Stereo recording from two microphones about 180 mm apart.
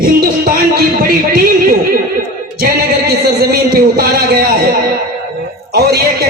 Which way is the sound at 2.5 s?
60° right (ahead or behind).